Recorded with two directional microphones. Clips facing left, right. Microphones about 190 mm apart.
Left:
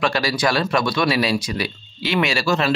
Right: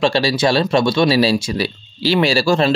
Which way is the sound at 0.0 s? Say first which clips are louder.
Right 5 dB; 25° right (ahead or behind).